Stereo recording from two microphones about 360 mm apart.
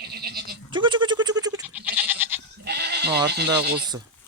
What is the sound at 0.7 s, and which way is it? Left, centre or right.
Goat, centre.